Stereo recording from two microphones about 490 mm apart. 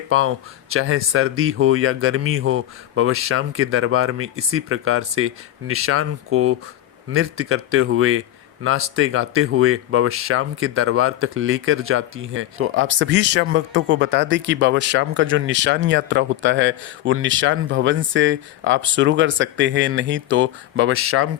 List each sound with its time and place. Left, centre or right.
0.1 s speech: right